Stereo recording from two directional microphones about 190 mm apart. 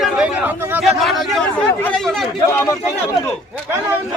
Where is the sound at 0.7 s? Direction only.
Centre (ahead or behind).